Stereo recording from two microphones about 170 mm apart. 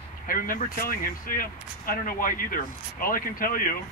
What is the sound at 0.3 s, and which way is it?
Speech, 55° left (ahead or behind).